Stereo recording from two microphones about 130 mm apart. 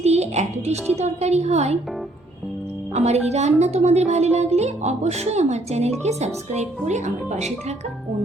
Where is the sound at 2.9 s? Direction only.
55° right (ahead or behind).